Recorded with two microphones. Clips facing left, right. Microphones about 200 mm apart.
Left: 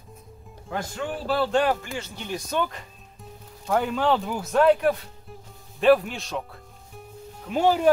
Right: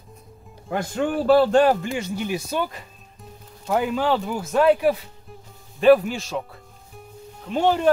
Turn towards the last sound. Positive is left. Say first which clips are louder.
# right 1 dB
turn(degrees=5)  # may be behind; listen again after turning